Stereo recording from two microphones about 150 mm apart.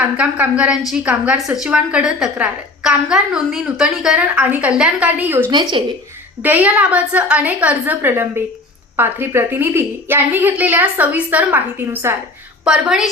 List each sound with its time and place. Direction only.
0.2 s a woman's voice: 10° right (ahead or behind)
5.5 s a woman's voice: 30° right (ahead or behind)
6.4 s a woman's voice: 10° right (ahead or behind)
12.6 s a woman's voice: 5° right (ahead or behind)